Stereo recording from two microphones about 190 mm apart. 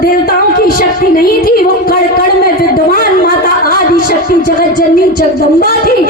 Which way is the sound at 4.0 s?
50° left (ahead or behind).